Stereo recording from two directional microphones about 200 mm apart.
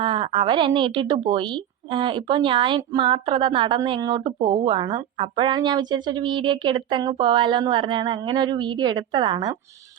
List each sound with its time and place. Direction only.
0.0 s a woman's voice: 25° right (ahead or behind)